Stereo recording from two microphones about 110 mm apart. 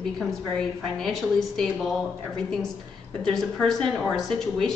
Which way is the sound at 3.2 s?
5° left (ahead or behind).